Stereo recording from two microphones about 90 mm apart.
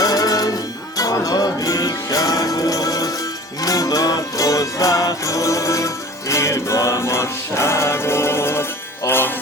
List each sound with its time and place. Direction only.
0.0 s music: 45° left (ahead or behind); by 9.3 s 25° left (ahead or behind)